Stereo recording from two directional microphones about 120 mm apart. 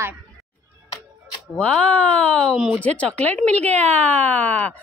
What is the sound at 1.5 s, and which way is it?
Speech, 10° left (ahead or behind).